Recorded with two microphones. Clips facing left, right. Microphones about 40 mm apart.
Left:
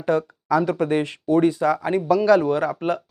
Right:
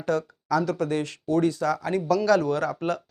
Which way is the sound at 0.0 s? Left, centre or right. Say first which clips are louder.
Left 4 dB; left.